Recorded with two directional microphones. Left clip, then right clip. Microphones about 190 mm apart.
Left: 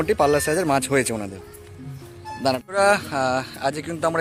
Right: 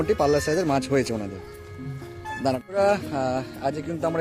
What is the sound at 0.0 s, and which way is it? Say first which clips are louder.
Speech: left 2 dB; centre (ahead or behind).